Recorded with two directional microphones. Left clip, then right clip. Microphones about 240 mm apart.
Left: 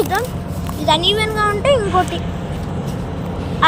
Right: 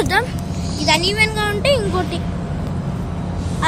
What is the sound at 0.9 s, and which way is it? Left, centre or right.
Speech, right.